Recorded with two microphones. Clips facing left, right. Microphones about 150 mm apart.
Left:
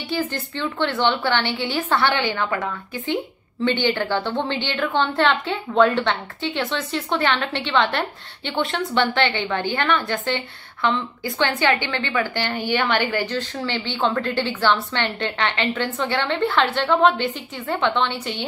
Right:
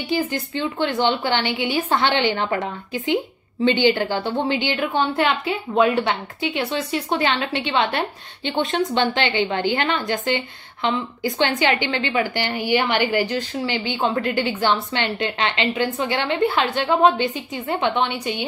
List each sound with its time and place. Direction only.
0.1 s a woman's voice: 15° right (ahead or behind); by 2.7 s 30° right (ahead or behind)
3.6 s a woman's voice: 15° right (ahead or behind)